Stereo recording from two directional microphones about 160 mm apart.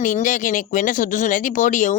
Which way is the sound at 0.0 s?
55° left (ahead or behind).